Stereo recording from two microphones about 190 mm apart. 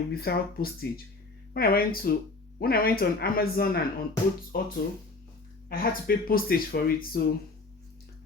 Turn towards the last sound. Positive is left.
turn(degrees=50)  # may be behind; listen again after turning